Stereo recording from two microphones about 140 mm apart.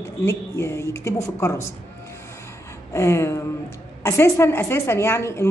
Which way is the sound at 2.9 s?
20° left (ahead or behind).